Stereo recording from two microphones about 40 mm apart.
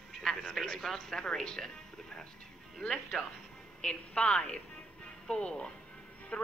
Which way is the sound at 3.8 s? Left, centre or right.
Left.